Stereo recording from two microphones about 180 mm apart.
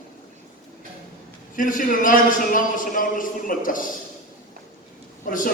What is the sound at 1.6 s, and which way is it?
Speech, 50° left (ahead or behind).